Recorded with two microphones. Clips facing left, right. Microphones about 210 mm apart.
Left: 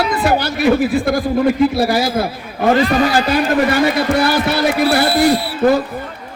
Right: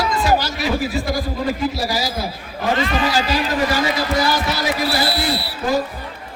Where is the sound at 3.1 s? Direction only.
55° left (ahead or behind).